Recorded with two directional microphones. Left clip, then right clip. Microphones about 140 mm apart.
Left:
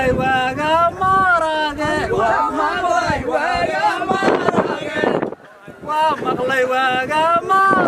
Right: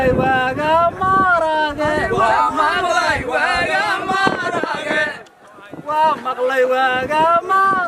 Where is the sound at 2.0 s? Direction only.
35° right (ahead or behind).